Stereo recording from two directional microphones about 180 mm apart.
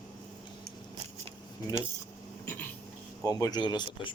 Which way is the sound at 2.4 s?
10° left (ahead or behind).